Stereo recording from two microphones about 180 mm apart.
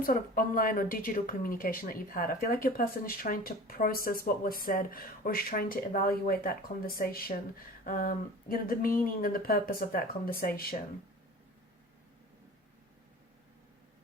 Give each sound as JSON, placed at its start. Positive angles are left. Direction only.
{"t": 0.0, "sound": "a woman's voice", "side_deg": 50}